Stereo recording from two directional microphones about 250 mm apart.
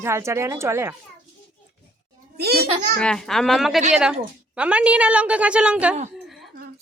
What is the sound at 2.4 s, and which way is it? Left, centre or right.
Speech, right.